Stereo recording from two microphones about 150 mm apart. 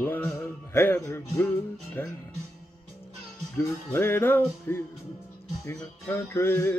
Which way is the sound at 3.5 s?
15° left (ahead or behind).